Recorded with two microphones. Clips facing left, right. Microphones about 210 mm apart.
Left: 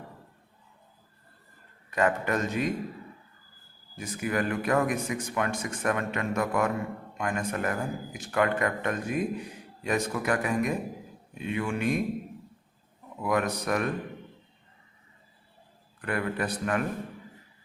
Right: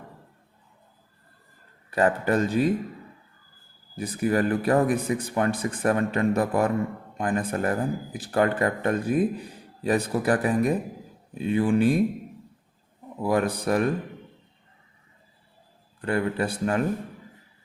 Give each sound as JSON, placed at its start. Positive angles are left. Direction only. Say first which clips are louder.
{"t": 1.9, "sound": "speech", "louder": "right 4 dB", "side_deg": -30}
{"t": 3.9, "sound": "speech", "louder": "right 6 dB", "side_deg": -35}
{"t": 13.1, "sound": "speech", "louder": "right 4 dB", "side_deg": -30}
{"t": 16.0, "sound": "speech", "louder": "right 5 dB", "side_deg": -30}